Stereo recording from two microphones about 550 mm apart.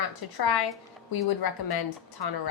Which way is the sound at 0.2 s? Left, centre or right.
Left.